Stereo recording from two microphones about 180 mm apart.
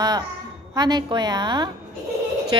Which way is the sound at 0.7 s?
25° right (ahead or behind).